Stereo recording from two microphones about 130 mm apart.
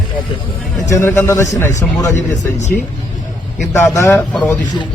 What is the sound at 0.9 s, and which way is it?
Speech, 20° left (ahead or behind).